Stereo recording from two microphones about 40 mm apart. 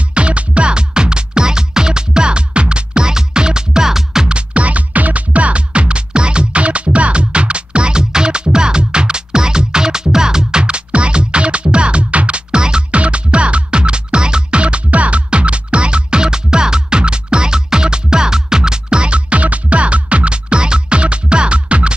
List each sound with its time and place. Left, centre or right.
0.1 s music: right; by 4.3 s centre
4.3 s music: right
10.6 s music: right